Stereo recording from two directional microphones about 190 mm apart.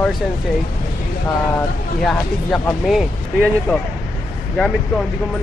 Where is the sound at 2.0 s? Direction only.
5° left (ahead or behind).